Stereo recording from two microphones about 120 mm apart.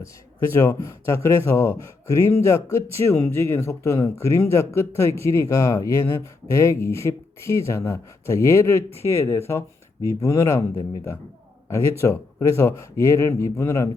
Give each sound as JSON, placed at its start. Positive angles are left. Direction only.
{"t": 0.5, "sound": "speech", "side_deg": 25}
{"t": 11.7, "sound": "speech", "side_deg": 20}